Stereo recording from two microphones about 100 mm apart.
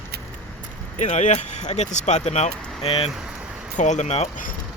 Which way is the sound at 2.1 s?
90° left.